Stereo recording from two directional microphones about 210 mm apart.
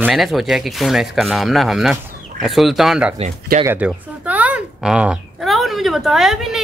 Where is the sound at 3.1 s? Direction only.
35° right (ahead or behind).